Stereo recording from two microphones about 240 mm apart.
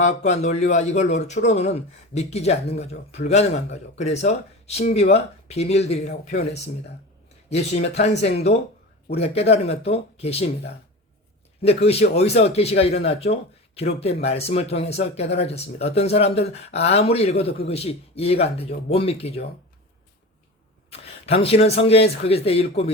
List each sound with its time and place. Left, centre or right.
0.0 s speech: left
11.6 s speech: left
20.9 s speech: left